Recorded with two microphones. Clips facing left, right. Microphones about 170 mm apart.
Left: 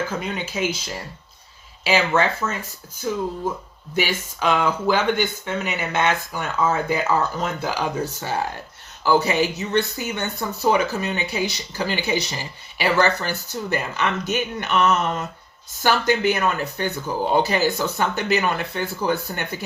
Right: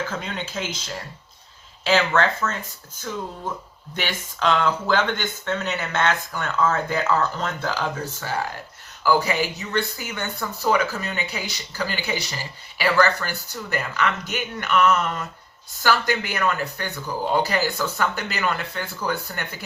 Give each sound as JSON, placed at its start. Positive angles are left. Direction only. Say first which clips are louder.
{"t": 0.1, "sound": "speech", "louder": "left 3 dB", "side_deg": 10}
{"t": 1.8, "sound": "speech", "louder": "even", "side_deg": 10}